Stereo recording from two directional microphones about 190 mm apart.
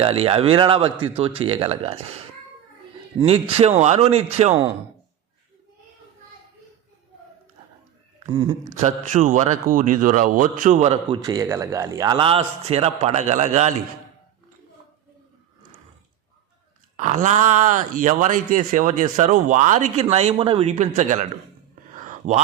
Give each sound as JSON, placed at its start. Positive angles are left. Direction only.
{"t": 0.0, "sound": "a man's voice", "side_deg": -30}
{"t": 3.2, "sound": "speech", "side_deg": -30}
{"t": 8.3, "sound": "a man's voice", "side_deg": -20}
{"t": 8.8, "sound": "a man's voice", "side_deg": -40}
{"t": 11.2, "sound": "a man's voice", "side_deg": -20}
{"t": 17.0, "sound": "speech", "side_deg": -40}
{"t": 21.9, "sound": "a sound", "side_deg": -40}